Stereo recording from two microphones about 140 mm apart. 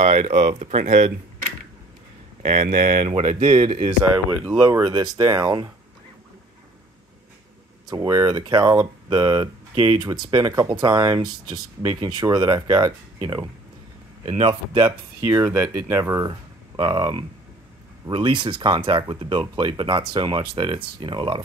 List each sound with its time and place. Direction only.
0.0 s speech: 45° right (ahead or behind)
3.4 s speech: 35° right (ahead or behind)
3.8 s speech: 15° right (ahead or behind)
7.9 s speech: 25° right (ahead or behind)
14.2 s speech: 50° right (ahead or behind)
14.5 s speech: 35° right (ahead or behind)
14.9 s speech: 15° right (ahead or behind); by 21.4 s 35° right (ahead or behind)